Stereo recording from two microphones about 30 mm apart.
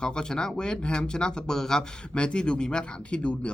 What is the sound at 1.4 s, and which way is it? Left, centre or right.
Speech, centre.